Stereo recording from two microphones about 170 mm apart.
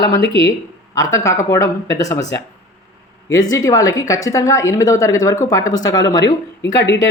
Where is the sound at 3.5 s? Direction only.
20° left (ahead or behind).